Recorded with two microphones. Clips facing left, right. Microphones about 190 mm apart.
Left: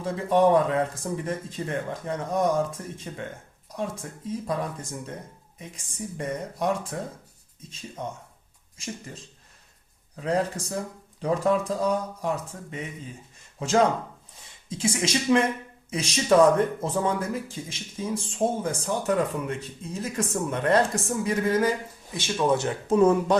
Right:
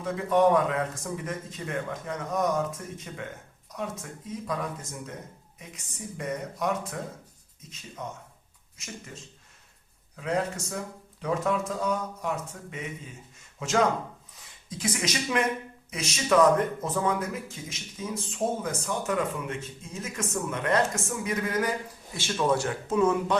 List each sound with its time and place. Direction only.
0.0 s speech: 30° left (ahead or behind)
5.5 s speech: 30° left (ahead or behind)
8.0 s speech: 30° left (ahead or behind)
10.2 s speech: 35° left (ahead or behind)
13.6 s speech: 35° left (ahead or behind)
22.1 s speech: 15° left (ahead or behind)
23.0 s speech: 35° left (ahead or behind)